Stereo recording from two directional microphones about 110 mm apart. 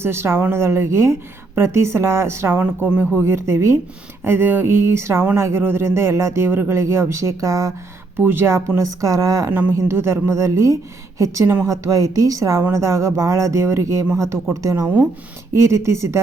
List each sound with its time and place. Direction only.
0.0 s speech: 25° right (ahead or behind)
9.5 s a woman's voice: 15° right (ahead or behind)